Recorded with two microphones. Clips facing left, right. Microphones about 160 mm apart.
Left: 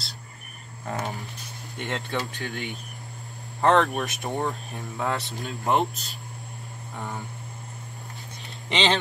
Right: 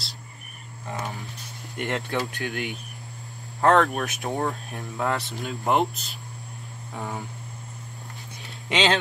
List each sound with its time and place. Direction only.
1.8 s speech: 5° right (ahead or behind)
8.6 s speech: 5° right (ahead or behind)